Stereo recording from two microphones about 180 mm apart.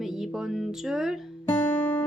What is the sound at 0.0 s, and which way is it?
Speech, centre (ahead or behind).